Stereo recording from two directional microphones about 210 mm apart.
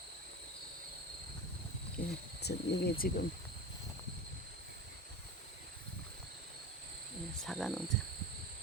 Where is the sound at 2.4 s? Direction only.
50° left (ahead or behind).